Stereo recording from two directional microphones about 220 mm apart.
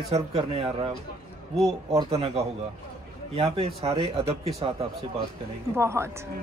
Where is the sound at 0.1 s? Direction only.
30° right (ahead or behind).